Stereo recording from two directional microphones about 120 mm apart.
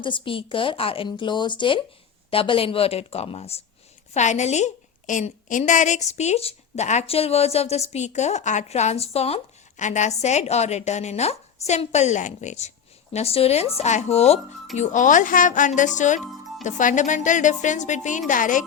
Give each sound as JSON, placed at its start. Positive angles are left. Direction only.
{"t": 0.0, "sound": "speech", "side_deg": 45}
{"t": 4.1, "sound": "a woman's voice", "side_deg": 80}
{"t": 6.1, "sound": "a woman's voice", "side_deg": 70}
{"t": 13.1, "sound": "speech", "side_deg": 55}
{"t": 14.8, "sound": "a woman's voice", "side_deg": 90}